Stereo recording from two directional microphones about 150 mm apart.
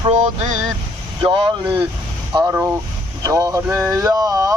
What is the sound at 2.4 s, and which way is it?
Vehicle, 10° right (ahead or behind).